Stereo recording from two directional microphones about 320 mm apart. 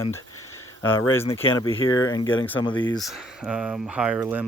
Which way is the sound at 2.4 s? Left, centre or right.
Centre.